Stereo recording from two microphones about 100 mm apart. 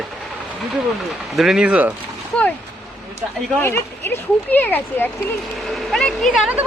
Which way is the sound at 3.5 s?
20° left (ahead or behind).